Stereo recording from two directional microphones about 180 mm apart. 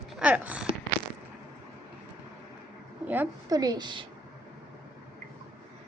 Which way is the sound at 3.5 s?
20° right (ahead or behind).